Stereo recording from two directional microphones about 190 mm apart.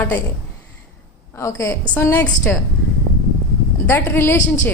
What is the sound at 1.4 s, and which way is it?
A woman's voice, 15° left (ahead or behind).